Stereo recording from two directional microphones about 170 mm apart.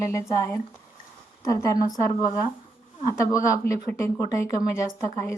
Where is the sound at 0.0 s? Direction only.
15° left (ahead or behind).